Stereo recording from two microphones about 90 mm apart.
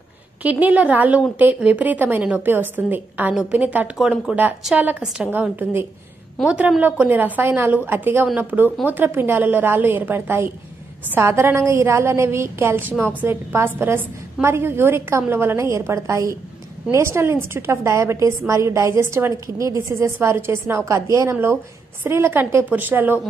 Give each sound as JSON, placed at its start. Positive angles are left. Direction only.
{"t": 0.4, "sound": "a woman's voice", "side_deg": -15}
{"t": 5.3, "sound": "a woman's voice", "side_deg": -20}